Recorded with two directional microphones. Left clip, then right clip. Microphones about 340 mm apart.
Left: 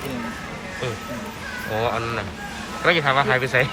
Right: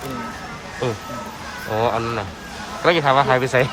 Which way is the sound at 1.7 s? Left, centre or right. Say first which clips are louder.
Right 4 dB; centre.